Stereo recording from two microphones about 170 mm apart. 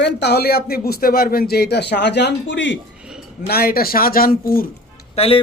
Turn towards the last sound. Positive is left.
turn(degrees=35)  # may be behind; listen again after turning